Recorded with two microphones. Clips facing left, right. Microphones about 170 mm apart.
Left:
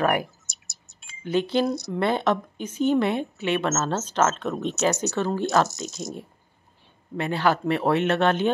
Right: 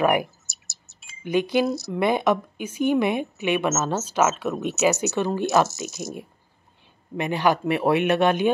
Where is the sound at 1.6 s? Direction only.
Centre (ahead or behind).